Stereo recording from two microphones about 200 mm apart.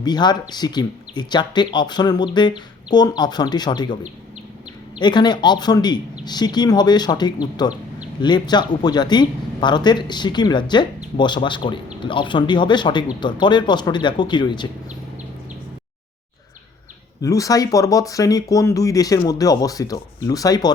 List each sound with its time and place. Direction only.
0.0 s speech: 20° left (ahead or behind)
4.9 s speech: 20° left (ahead or behind)
17.2 s speech: 15° left (ahead or behind)